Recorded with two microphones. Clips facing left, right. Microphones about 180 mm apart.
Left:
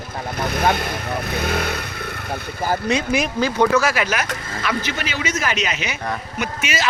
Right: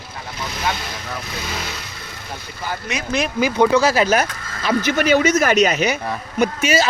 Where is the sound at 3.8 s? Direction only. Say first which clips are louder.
Right 5 dB; 35° right (ahead or behind).